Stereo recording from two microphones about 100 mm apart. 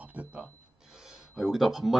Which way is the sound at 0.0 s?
15° right (ahead or behind).